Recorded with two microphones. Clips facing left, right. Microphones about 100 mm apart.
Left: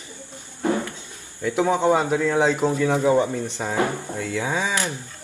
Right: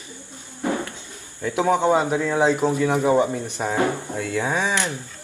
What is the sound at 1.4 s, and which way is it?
Speech, 15° right (ahead or behind).